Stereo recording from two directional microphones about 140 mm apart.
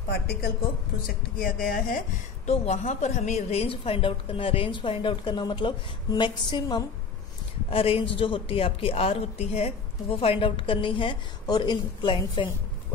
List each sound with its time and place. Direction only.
1.0 s speech: 90° left
2.4 s a woman's voice: 50° left (ahead or behind); by 6.9 s 30° left (ahead or behind)
7.7 s a woman's voice: 40° left (ahead or behind)